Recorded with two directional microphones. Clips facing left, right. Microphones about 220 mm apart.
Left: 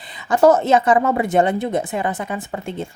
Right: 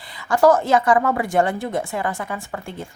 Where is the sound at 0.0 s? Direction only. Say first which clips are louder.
Left 2 dB; 20° left (ahead or behind).